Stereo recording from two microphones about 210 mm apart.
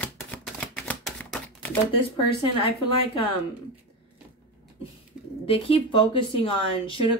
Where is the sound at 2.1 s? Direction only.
25° left (ahead or behind).